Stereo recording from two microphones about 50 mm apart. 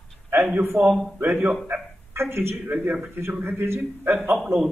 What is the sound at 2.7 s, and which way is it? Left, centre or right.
Speech, right.